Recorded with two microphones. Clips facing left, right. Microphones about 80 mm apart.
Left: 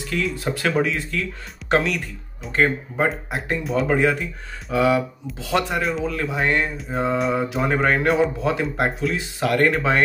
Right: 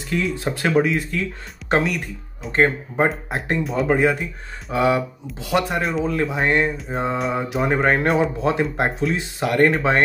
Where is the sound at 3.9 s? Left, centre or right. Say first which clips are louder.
Right 2 dB; centre.